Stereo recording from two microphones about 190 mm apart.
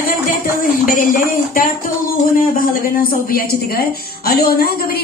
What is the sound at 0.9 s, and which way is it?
Speech, 45° left (ahead or behind).